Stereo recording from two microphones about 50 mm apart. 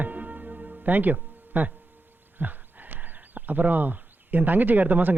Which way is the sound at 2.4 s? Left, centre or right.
Right.